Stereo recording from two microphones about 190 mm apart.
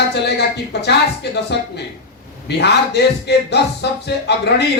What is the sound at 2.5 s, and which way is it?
A man's voice, 60° left (ahead or behind).